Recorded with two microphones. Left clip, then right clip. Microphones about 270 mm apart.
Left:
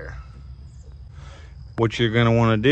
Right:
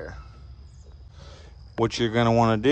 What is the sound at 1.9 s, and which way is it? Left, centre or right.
Speech, right.